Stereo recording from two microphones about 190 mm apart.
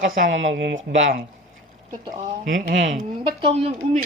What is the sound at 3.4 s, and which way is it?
Speech, 30° right (ahead or behind).